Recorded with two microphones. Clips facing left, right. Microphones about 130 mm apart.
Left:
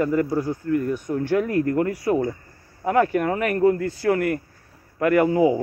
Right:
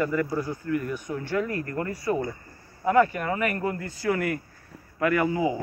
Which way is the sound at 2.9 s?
55° left (ahead or behind).